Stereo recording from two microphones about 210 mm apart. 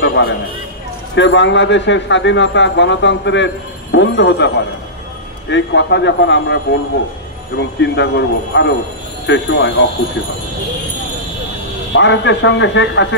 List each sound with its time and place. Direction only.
0.0 s a sound: 60° left (ahead or behind)
1.1 s speech: 60° left (ahead or behind)
11.9 s speech: 60° left (ahead or behind)